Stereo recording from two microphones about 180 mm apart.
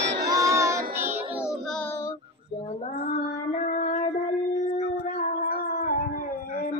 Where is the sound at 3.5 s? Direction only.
45° left (ahead or behind).